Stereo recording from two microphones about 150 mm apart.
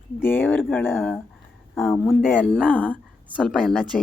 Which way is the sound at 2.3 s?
10° left (ahead or behind).